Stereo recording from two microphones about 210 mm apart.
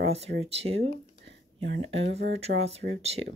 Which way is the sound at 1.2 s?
55° right (ahead or behind).